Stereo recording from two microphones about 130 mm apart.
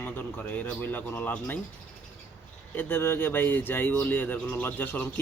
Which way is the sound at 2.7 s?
15° left (ahead or behind).